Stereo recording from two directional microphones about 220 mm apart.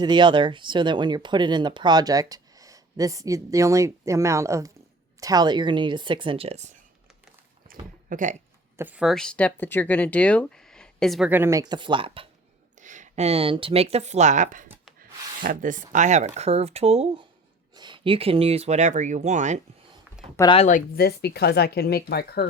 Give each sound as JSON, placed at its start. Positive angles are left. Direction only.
{"t": 0.0, "sound": "speech", "side_deg": -20}
{"t": 8.1, "sound": "speech", "side_deg": -35}
{"t": 8.8, "sound": "speech", "side_deg": -5}
{"t": 12.8, "sound": "speech", "side_deg": -35}
{"t": 20.3, "sound": "speech", "side_deg": 15}
{"t": 20.6, "sound": "speech", "side_deg": 35}